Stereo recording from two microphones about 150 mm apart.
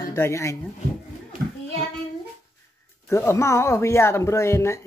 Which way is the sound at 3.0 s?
15° left (ahead or behind).